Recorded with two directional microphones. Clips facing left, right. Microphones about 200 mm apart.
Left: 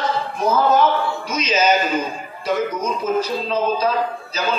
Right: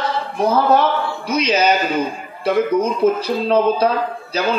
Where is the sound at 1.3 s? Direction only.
65° right (ahead or behind).